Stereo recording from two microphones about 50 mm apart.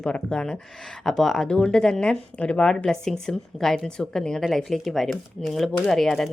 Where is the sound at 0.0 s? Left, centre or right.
Centre.